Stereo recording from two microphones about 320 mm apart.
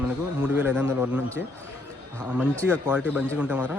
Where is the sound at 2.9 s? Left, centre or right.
Centre.